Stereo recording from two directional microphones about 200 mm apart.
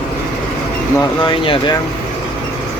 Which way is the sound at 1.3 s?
25° left (ahead or behind).